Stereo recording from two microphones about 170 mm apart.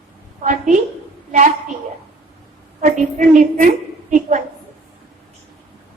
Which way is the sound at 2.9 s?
50° right (ahead or behind).